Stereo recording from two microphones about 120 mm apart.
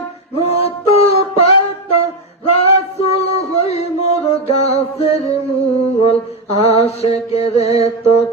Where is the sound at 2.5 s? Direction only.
55° left (ahead or behind).